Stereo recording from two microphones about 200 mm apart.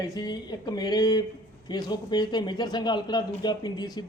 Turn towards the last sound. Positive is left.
turn(degrees=20)  # may be behind; listen again after turning